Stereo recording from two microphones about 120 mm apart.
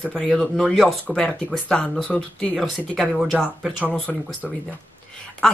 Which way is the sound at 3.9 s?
10° left (ahead or behind).